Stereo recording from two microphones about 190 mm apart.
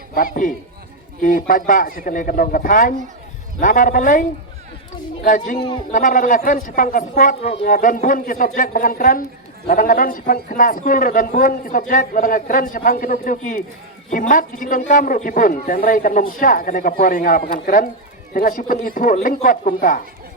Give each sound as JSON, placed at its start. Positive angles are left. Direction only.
{"t": 1.2, "sound": "a man's voice", "side_deg": 45}
{"t": 5.5, "sound": "speech", "side_deg": 25}
{"t": 5.9, "sound": "a man's voice", "side_deg": 45}